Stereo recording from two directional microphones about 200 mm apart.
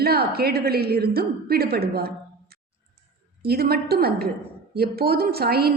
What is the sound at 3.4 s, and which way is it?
A woman's voice, 50° right (ahead or behind).